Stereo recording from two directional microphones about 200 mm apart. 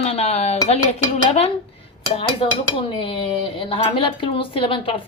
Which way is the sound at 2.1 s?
30° left (ahead or behind).